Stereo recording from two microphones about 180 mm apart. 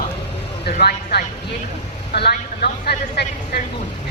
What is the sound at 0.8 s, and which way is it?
A man's voice, 65° left (ahead or behind).